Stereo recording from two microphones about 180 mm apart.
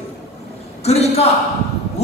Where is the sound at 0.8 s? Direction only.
35° left (ahead or behind).